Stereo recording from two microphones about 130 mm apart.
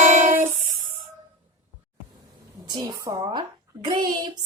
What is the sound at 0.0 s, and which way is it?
Music, 75° right (ahead or behind).